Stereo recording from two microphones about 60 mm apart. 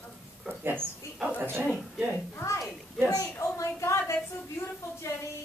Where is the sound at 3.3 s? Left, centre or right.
Left.